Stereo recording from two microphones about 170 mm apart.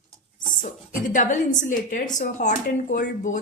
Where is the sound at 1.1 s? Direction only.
45° left (ahead or behind).